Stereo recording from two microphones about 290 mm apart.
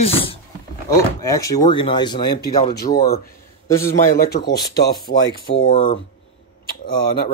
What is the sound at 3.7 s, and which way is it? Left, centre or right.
Speech, centre.